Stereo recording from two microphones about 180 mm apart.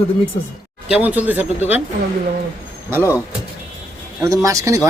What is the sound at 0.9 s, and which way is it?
Speech, 10° right (ahead or behind).